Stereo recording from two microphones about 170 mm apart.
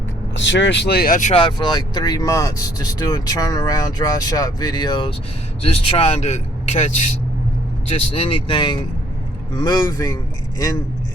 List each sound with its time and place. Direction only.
0.3 s speech: 90° left; by 1.3 s 55° left (ahead or behind)
1.3 s speech: 30° left (ahead or behind)